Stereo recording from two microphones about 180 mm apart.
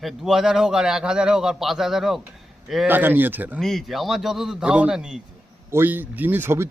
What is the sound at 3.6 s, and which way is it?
A man's voice, centre (ahead or behind).